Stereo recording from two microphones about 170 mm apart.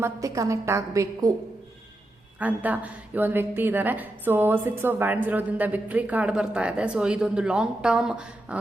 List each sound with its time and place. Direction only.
0.0 s a woman's voice: 20° right (ahead or behind)
2.4 s a woman's voice: 10° right (ahead or behind)